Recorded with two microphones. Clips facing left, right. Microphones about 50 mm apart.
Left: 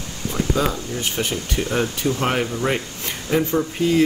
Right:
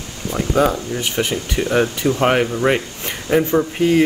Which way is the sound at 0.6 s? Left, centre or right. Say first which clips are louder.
Right 6 dB; right.